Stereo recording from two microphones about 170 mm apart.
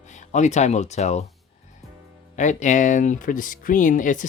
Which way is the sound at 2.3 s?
45° left (ahead or behind).